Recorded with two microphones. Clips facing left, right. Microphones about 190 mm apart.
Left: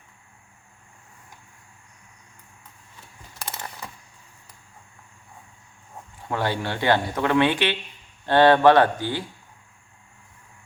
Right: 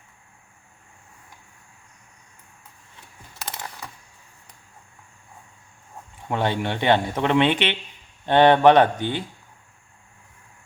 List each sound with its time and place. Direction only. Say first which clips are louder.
6.2 s a man's voice: right 2 dB; 20° right (ahead or behind)